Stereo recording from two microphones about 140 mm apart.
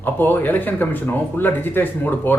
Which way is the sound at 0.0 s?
15° left (ahead or behind).